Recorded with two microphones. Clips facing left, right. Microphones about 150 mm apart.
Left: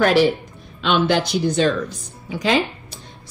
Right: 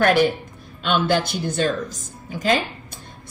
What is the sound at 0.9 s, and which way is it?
A woman's voice, 45° right (ahead or behind).